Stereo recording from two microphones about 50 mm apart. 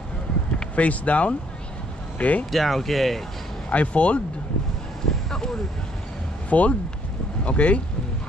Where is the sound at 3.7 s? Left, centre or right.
Left.